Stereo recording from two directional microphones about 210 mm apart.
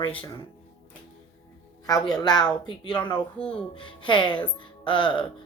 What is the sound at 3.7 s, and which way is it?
Speech, 25° left (ahead or behind).